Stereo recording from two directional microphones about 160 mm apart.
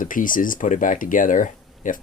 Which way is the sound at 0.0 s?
60° left (ahead or behind).